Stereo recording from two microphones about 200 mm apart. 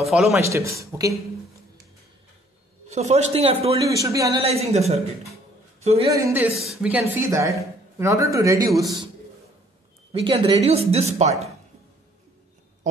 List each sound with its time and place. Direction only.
0.0 s speech: centre (ahead or behind)
0.4 s speech: 15° right (ahead or behind)
2.9 s speech: 35° right (ahead or behind)
3.8 s speech: 15° right (ahead or behind)
4.4 s speech: 30° right (ahead or behind)
5.8 s a sound: 30° right (ahead or behind)
6.1 s speech: 15° right (ahead or behind)
6.6 s speech: centre (ahead or behind)
7.0 s speech: 15° right (ahead or behind)
10.1 s speech: 30° right (ahead or behind)